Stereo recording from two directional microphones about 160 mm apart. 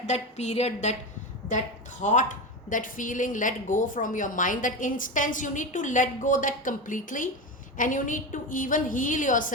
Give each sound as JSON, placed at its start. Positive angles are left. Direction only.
{"t": 0.0, "sound": "a woman's voice", "side_deg": 45}